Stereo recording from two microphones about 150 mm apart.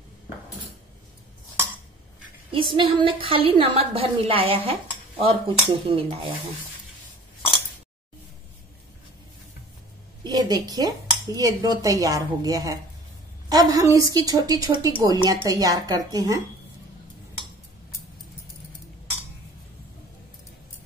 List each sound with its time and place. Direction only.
2.5 s a woman's voice: 35° right (ahead or behind)
10.2 s a woman's voice: 25° right (ahead or behind)